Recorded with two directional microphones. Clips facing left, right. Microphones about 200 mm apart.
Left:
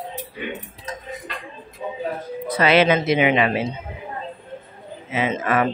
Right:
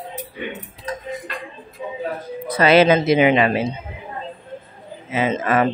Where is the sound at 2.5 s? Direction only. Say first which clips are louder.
Right 3 dB; 40° right (ahead or behind).